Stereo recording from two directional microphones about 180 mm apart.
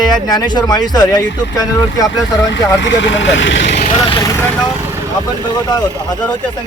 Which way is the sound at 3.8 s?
35° left (ahead or behind).